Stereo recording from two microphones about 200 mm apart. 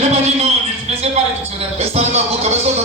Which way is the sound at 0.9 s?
30° right (ahead or behind).